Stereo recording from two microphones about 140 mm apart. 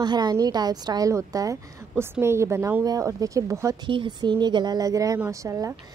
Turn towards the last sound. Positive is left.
turn(degrees=-25)  # may be behind; listen again after turning